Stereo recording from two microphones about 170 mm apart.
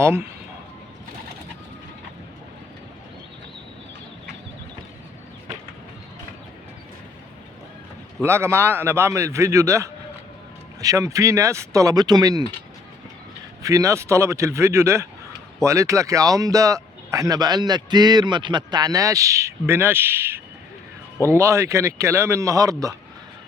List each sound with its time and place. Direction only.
0.0 s speech: 15° right (ahead or behind)
8.2 s speech: 15° right (ahead or behind)
13.6 s speech: 20° right (ahead or behind)